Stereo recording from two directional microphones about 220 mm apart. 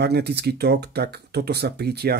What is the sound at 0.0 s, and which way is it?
Speech, 50° right (ahead or behind).